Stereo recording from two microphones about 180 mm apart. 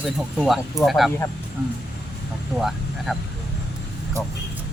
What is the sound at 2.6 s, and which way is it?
Speech, centre (ahead or behind).